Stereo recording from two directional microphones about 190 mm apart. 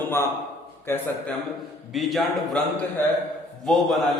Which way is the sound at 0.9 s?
15° left (ahead or behind).